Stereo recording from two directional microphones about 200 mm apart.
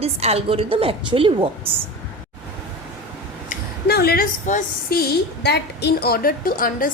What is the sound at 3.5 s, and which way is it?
A woman's voice, 50° left (ahead or behind).